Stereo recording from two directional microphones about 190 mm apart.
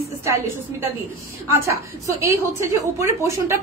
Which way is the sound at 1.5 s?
15° right (ahead or behind).